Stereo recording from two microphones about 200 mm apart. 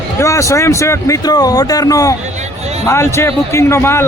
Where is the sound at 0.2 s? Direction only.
15° left (ahead or behind).